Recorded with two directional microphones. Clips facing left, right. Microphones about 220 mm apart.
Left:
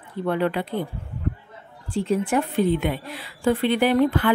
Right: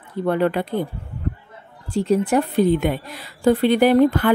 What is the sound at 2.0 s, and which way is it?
A woman's voice, 40° right (ahead or behind).